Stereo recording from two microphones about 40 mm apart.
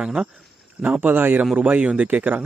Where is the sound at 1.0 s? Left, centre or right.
Right.